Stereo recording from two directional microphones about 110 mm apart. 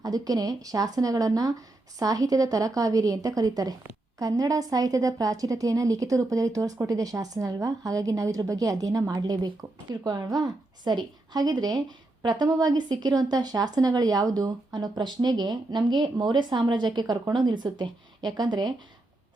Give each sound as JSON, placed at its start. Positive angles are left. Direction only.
{"t": 0.0, "sound": "a woman's voice", "side_deg": -35}